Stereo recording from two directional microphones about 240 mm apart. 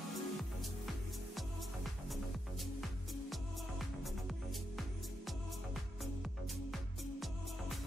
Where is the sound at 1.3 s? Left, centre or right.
Centre.